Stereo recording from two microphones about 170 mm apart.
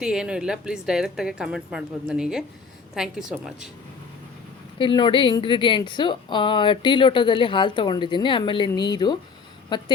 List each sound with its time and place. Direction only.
0.0 s a woman's voice: 5° right (ahead or behind)
4.8 s speech: 30° left (ahead or behind)